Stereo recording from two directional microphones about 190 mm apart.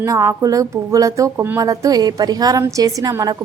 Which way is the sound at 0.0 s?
15° right (ahead or behind).